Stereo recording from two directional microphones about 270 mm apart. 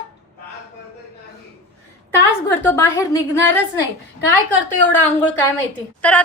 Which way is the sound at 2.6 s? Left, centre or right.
Centre.